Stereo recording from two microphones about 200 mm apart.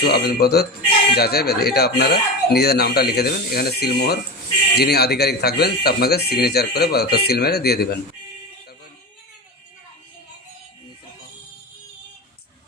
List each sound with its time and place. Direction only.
0.0 s speech: 50° left (ahead or behind)